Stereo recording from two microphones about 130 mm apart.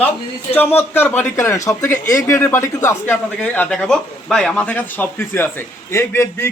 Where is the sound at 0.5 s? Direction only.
15° left (ahead or behind).